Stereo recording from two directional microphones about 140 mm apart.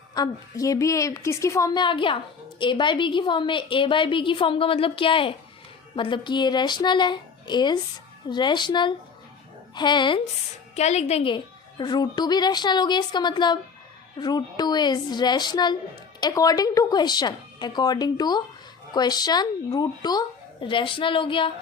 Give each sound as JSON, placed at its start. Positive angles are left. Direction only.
{"t": 0.1, "sound": "a woman's voice", "side_deg": 25}
{"t": 10.8, "sound": "a woman's voice", "side_deg": 50}